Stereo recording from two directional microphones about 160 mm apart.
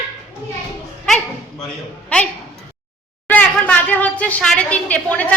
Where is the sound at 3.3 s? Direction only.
10° left (ahead or behind).